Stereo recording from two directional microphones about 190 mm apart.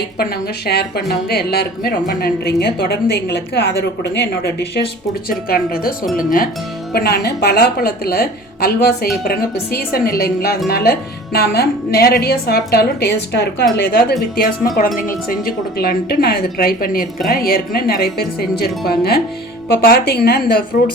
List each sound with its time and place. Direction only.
0.2 s speech: 55° left (ahead or behind)
5.5 s speech: 50° left (ahead or behind)